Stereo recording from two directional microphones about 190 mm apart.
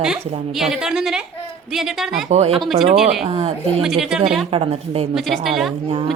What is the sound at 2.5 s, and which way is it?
Speech, centre (ahead or behind).